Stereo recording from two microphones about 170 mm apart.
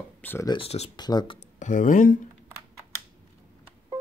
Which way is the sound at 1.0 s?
25° left (ahead or behind).